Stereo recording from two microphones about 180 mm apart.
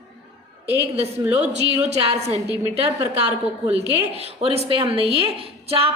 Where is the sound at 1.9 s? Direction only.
35° right (ahead or behind).